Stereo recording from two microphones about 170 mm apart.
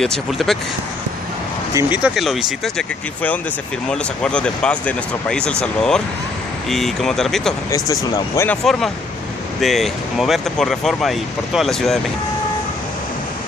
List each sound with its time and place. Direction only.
0.0 s speech: centre (ahead or behind)
1.7 s speech: 20° right (ahead or behind)
2.0 s speech: centre (ahead or behind)
3.9 s speech: 5° left (ahead or behind)
7.7 s speech: 20° left (ahead or behind)
8.6 s speech: centre (ahead or behind)